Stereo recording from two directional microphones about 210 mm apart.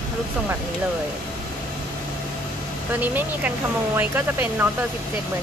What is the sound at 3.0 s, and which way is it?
Speech, 10° right (ahead or behind).